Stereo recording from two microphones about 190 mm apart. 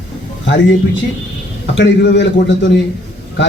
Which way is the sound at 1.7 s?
65° left (ahead or behind).